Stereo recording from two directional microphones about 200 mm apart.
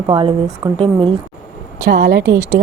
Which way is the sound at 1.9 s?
55° right (ahead or behind).